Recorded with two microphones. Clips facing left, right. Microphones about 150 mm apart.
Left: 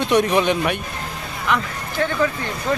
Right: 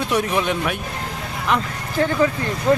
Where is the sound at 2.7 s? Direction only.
5° right (ahead or behind).